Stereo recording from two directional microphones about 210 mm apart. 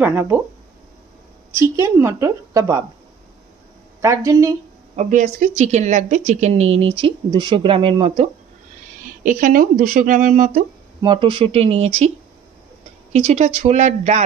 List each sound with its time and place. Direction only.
0.0 s a woman's voice: 10° right (ahead or behind)
1.5 s a woman's voice: 10° right (ahead or behind)
4.0 s a woman's voice: 15° right (ahead or behind)
4.9 s speech: 35° right (ahead or behind)
9.2 s speech: 40° right (ahead or behind)
11.0 s speech: 25° right (ahead or behind)
13.1 s speech: 30° right (ahead or behind)